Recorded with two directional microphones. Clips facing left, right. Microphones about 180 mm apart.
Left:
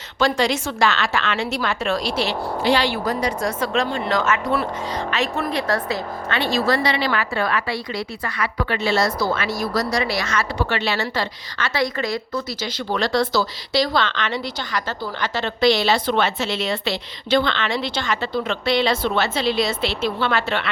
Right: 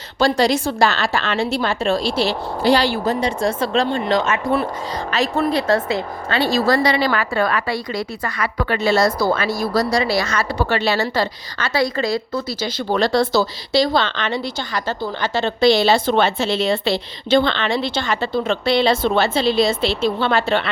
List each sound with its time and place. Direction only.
0.2 s a woman's voice: 35° right (ahead or behind)
5.1 s a woman's voice: 35° right (ahead or behind)